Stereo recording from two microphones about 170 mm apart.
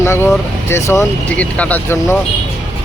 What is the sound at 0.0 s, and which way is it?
Speech, 15° left (ahead or behind).